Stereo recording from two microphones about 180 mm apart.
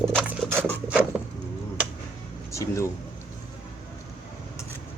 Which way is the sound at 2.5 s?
15° left (ahead or behind).